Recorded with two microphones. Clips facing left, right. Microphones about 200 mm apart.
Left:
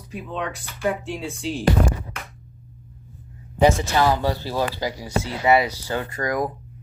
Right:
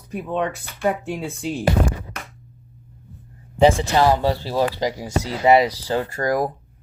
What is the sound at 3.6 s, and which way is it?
Speech, 30° right (ahead or behind).